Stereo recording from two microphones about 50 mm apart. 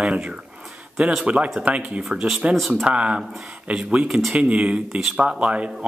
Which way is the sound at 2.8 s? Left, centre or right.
Right.